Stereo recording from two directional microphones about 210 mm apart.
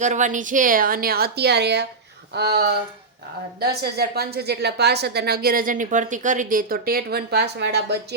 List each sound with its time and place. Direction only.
0.0 s a woman's voice: 35° right (ahead or behind); by 7.9 s 50° right (ahead or behind)